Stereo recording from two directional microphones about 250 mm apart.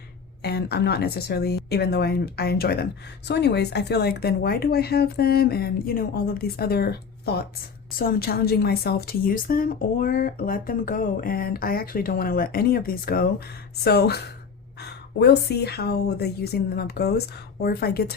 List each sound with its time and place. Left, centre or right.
0.4 s a woman's voice: left